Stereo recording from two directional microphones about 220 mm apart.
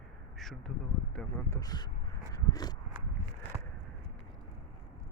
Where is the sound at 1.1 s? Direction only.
15° left (ahead or behind).